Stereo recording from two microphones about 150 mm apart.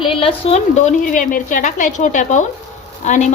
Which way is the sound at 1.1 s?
60° left (ahead or behind).